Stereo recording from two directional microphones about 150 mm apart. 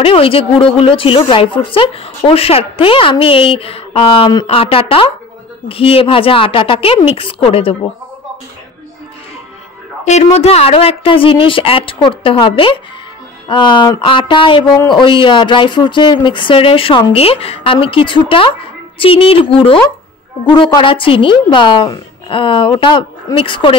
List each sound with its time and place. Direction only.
0.0 s speech: 40° left (ahead or behind)
10.0 s speech: 50° left (ahead or behind)